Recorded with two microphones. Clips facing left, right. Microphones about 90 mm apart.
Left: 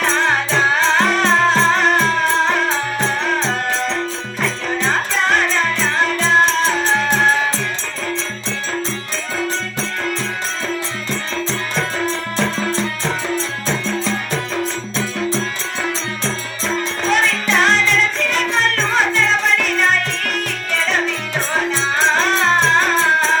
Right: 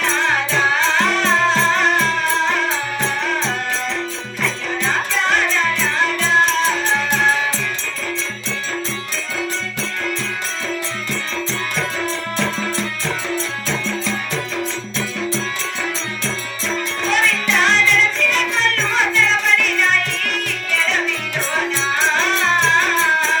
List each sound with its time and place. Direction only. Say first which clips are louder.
0.0 s music: left 2 dB; 40° left (ahead or behind)
17.1 s music: left 2 dB; 40° left (ahead or behind)